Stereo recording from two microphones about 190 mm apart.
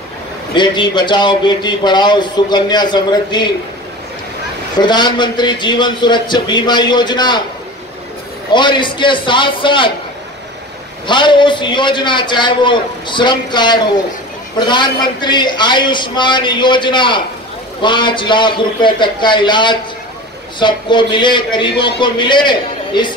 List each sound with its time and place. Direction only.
0.6 s a man's voice: 25° left (ahead or behind)
4.8 s a man's voice: 25° left (ahead or behind)
8.5 s a man's voice: 25° left (ahead or behind)
11.1 s a man's voice: 25° left (ahead or behind)